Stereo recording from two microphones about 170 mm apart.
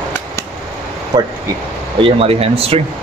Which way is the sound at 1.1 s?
20° right (ahead or behind).